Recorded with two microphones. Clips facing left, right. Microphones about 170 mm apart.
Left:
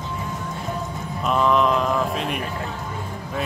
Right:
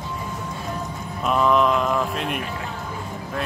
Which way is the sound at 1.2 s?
Centre (ahead or behind).